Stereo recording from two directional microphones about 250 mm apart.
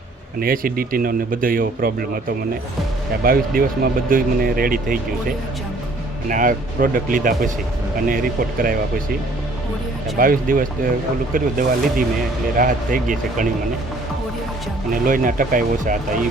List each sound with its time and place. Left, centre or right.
0.3 s speech: right
3.2 s speech: right
6.2 s speech: right
10.2 s speech: right
14.9 s speech: right